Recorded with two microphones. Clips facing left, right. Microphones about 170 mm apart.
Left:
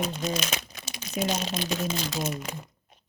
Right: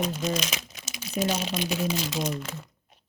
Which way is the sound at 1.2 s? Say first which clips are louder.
Right 1 dB; 40° right (ahead or behind).